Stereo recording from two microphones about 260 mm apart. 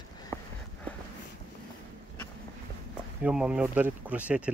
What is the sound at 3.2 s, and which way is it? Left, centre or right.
Speech, centre.